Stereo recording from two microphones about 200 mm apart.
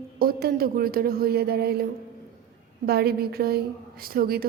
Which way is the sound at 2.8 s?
50° right (ahead or behind).